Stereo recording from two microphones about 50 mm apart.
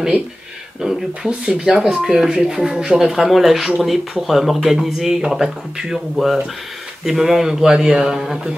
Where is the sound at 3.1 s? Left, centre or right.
Centre.